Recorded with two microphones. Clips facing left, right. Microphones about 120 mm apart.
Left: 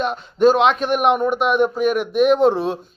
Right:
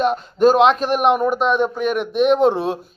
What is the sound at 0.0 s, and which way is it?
Speech, centre (ahead or behind).